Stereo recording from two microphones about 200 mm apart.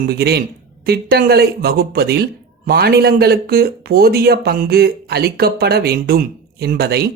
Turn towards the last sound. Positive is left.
turn(degrees=-50)  # may be behind; listen again after turning